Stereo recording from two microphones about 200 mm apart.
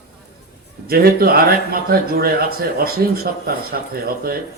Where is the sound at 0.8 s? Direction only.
50° right (ahead or behind).